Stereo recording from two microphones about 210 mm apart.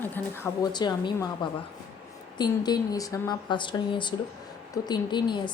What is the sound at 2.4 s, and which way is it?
Speech, 20° left (ahead or behind).